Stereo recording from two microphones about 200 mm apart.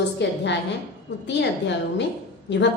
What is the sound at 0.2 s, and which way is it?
A woman's voice, 60° left (ahead or behind).